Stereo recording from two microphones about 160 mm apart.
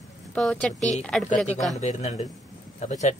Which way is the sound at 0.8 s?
45° left (ahead or behind).